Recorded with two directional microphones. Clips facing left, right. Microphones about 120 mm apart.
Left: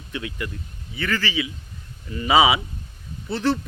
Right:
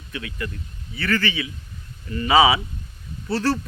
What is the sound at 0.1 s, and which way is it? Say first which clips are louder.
Speech: left 2 dB; 20° left (ahead or behind).